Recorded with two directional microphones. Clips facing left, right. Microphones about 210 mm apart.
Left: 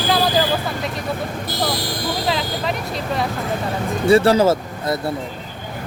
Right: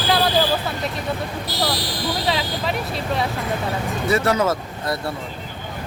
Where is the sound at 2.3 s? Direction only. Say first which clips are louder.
Left 1 dB; centre (ahead or behind).